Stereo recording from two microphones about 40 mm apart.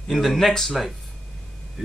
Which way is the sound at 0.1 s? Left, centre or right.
Centre.